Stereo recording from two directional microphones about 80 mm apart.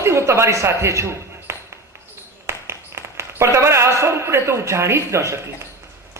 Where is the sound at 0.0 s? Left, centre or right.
Right.